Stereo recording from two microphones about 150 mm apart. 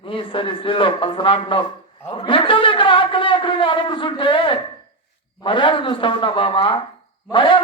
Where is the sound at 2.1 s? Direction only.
35° left (ahead or behind).